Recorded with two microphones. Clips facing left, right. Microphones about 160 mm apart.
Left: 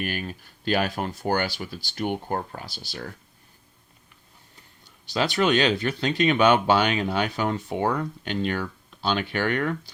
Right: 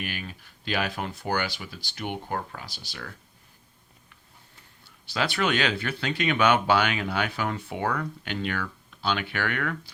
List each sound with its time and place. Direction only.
0.0 s speech: 45° left (ahead or behind)
5.1 s speech: 20° left (ahead or behind)